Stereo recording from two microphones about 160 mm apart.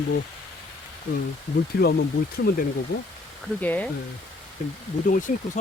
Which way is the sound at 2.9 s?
70° left (ahead or behind).